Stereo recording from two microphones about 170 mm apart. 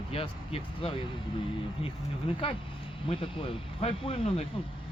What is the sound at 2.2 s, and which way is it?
Speech, 30° left (ahead or behind).